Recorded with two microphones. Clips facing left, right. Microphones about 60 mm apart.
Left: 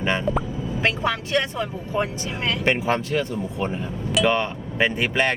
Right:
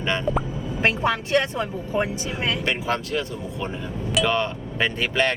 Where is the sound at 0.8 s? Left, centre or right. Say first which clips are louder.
Right 2 dB; right.